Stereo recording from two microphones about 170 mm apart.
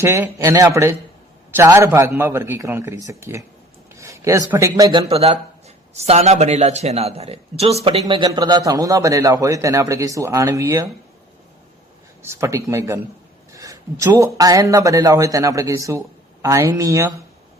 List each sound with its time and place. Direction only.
0.0 s a man's voice: 15° right (ahead or behind); by 8.0 s 35° right (ahead or behind)
8.0 s speech: 25° right (ahead or behind)
12.2 s a man's voice: 15° right (ahead or behind)